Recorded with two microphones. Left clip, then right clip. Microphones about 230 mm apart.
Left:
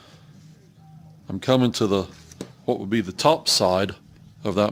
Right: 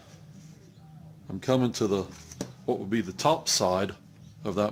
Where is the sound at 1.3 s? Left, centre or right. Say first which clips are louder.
Left 6 dB; left.